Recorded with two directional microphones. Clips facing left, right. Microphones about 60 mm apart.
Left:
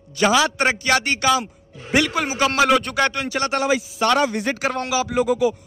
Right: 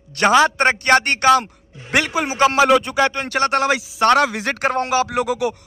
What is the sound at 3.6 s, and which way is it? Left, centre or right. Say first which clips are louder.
Speech: right 2 dB; right.